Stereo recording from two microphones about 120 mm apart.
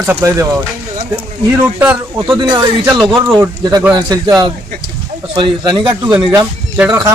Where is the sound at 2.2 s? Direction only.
40° right (ahead or behind).